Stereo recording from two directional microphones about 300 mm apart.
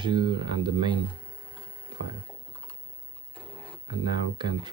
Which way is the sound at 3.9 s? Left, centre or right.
Centre.